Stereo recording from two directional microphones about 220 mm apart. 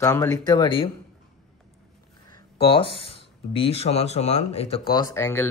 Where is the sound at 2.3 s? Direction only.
25° left (ahead or behind).